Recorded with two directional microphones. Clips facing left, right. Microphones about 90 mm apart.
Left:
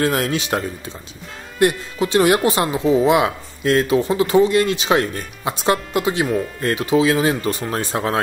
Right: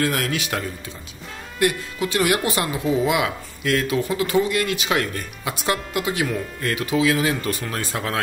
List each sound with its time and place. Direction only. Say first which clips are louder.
0.0 s speech: left 4 dB; 25° left (ahead or behind)